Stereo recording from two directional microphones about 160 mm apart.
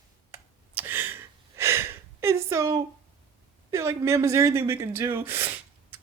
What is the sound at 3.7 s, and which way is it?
Speech, 20° right (ahead or behind).